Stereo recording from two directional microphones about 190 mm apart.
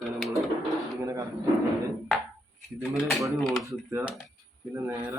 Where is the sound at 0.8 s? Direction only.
15° right (ahead or behind).